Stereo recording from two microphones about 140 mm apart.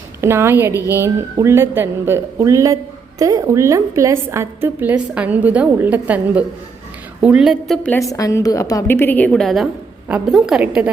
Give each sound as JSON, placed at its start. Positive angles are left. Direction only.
{"t": 0.2, "sound": "a woman's voice", "side_deg": -20}
{"t": 7.9, "sound": "a woman's voice", "side_deg": 25}